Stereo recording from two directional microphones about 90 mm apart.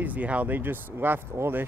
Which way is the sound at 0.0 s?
15° right (ahead or behind).